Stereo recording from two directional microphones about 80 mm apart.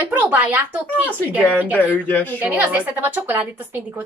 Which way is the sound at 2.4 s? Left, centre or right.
Right.